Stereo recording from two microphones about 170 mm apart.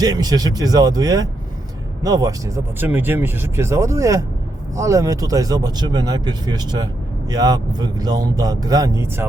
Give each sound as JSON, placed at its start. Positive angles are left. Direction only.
{"t": 0.0, "sound": "speech", "side_deg": -20}